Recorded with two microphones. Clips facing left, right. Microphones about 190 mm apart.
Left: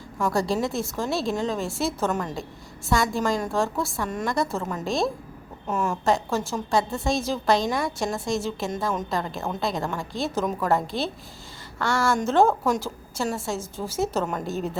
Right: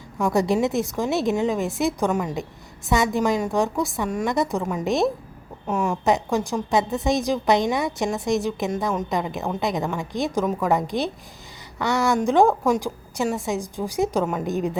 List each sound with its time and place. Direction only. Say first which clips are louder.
0.3 s a woman's voice: right 4 dB; 20° right (ahead or behind)
5.6 s a woman's voice: right 2 dB; 10° right (ahead or behind)